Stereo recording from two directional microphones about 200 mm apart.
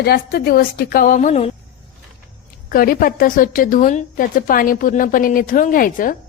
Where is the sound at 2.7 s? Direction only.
45° left (ahead or behind).